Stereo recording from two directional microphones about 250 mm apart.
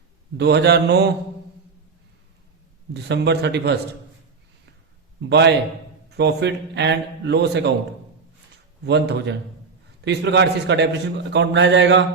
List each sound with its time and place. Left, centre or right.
0.3 s mantra: right
2.9 s a man's voice: right
5.2 s a man's voice: right
8.8 s a man's voice: right